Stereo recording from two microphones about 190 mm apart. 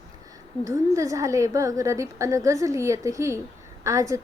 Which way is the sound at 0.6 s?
15° right (ahead or behind).